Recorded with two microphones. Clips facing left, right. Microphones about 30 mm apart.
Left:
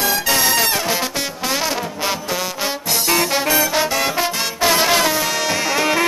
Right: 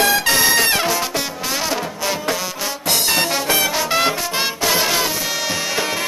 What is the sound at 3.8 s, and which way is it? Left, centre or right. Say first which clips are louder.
Music: right 2 dB; right.